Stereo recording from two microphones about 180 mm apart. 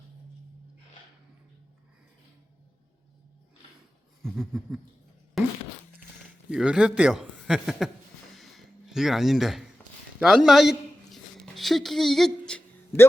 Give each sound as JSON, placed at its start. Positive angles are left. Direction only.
{"t": 4.4, "sound": "a man's voice", "side_deg": 0}
{"t": 5.4, "sound": "fart", "side_deg": 0}
{"t": 6.5, "sound": "a man's voice", "side_deg": -5}
{"t": 8.4, "sound": "a sound", "side_deg": 0}